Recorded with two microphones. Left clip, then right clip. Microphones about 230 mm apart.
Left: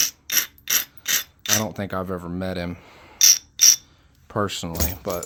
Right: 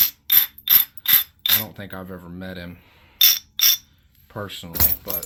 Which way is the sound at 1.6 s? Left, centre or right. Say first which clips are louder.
Left 8 dB; left.